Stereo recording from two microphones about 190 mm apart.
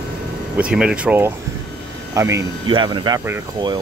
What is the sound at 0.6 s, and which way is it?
Speech, 5° right (ahead or behind).